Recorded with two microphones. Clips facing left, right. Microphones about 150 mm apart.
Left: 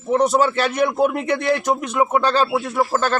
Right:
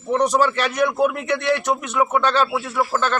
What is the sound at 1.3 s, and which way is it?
Speech, 30° left (ahead or behind).